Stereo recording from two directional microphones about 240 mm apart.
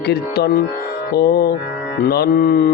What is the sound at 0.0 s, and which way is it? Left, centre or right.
Mantra, left.